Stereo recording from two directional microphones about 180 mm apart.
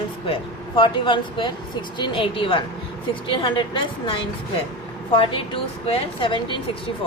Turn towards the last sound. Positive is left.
turn(degrees=30)  # may be behind; listen again after turning